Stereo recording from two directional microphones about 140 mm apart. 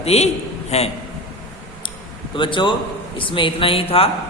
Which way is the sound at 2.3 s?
35° left (ahead or behind).